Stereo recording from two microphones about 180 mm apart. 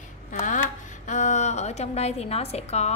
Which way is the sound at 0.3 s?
45° left (ahead or behind).